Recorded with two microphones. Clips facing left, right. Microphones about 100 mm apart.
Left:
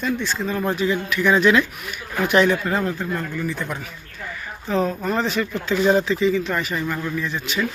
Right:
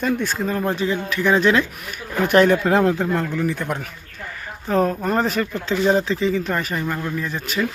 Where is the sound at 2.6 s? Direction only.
80° right; by 5.4 s 45° right (ahead or behind).